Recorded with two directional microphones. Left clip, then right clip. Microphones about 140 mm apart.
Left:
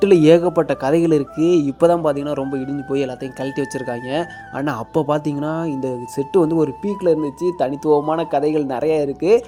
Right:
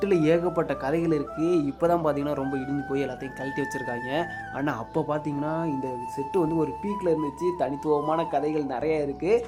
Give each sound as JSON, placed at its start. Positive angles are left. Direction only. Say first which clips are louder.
{"t": 0.0, "sound": "speech", "louder": "left 11 dB", "side_deg": 45}